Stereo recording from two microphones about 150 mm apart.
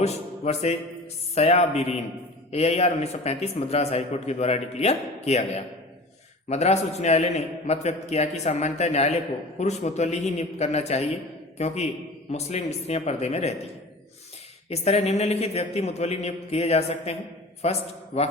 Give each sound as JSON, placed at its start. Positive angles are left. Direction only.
{"t": 0.0, "sound": "a sound", "side_deg": 45}
{"t": 1.4, "sound": "a man's voice", "side_deg": 45}
{"t": 14.7, "sound": "a man's voice", "side_deg": 45}